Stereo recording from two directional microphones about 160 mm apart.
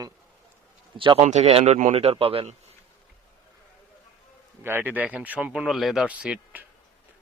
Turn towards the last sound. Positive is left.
turn(degrees=-5)  # may be behind; listen again after turning